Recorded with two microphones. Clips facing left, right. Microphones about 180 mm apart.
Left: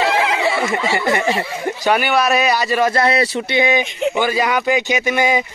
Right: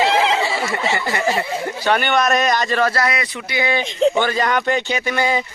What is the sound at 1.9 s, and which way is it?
Speech, 5° left (ahead or behind).